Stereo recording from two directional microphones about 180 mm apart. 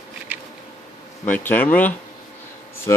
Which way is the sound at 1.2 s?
10° left (ahead or behind).